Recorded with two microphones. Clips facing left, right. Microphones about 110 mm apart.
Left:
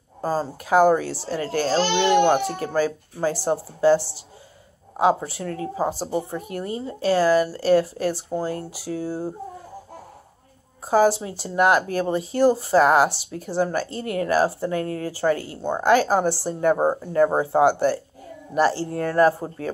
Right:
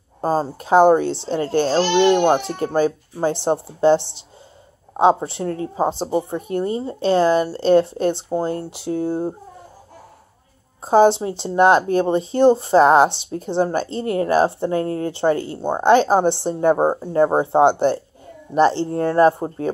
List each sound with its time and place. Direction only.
0.2 s speech: 25° right (ahead or behind)
10.9 s speech: 25° right (ahead or behind)